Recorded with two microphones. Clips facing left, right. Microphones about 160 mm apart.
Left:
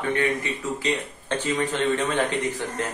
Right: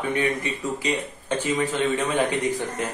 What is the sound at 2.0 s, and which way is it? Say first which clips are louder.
Speech: right 1 dB; 15° right (ahead or behind).